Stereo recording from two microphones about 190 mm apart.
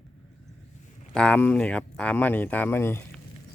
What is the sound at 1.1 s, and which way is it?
Speech, 5° left (ahead or behind).